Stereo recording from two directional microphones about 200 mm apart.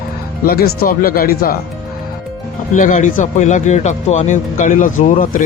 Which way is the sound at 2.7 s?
40° left (ahead or behind).